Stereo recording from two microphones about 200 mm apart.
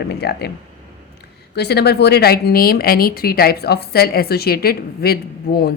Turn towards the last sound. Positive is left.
turn(degrees=50)  # may be behind; listen again after turning